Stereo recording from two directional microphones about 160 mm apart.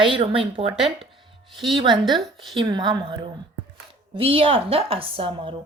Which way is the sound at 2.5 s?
30° right (ahead or behind).